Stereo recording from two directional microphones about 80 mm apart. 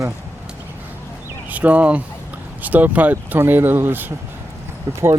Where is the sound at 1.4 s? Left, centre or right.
Centre.